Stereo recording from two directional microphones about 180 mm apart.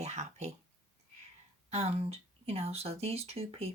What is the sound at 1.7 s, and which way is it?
Speech, 35° right (ahead or behind).